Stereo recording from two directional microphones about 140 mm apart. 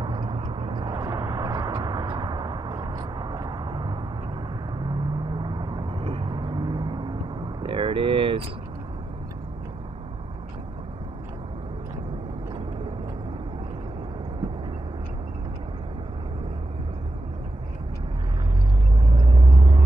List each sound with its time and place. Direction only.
0.0 s vehicle: 35° right (ahead or behind)
19.1 s vehicle: 35° right (ahead or behind)